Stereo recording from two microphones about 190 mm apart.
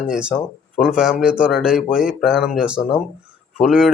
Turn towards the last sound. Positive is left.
turn(degrees=-5)  # may be behind; listen again after turning